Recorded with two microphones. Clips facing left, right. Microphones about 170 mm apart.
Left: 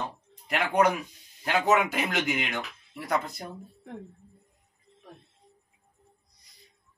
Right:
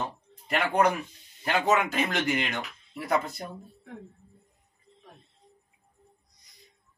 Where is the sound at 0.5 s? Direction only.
Centre (ahead or behind).